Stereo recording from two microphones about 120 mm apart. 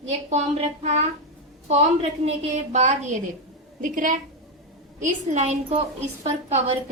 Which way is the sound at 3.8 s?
90° right.